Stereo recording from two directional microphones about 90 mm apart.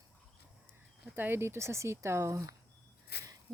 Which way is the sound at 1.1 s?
25° right (ahead or behind).